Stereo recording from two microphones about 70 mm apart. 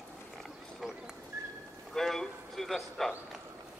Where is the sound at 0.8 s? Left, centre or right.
Centre.